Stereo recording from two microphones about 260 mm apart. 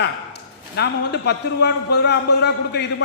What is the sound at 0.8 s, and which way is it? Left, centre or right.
A man's voice, left.